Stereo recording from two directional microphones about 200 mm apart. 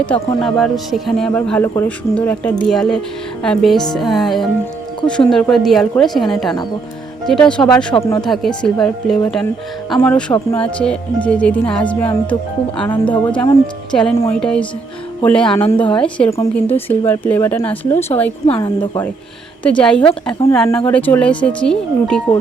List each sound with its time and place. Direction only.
0.1 s a man's voice: 5° left (ahead or behind)
18.4 s a woman's voice: 30° left (ahead or behind)
18.8 s a man's voice: 10° left (ahead or behind)